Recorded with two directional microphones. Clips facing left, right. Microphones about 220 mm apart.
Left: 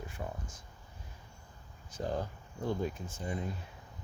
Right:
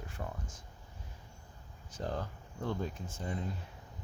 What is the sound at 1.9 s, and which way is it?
Speech, 10° left (ahead or behind).